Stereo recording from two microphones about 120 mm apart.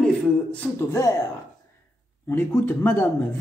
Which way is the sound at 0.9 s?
25° left (ahead or behind).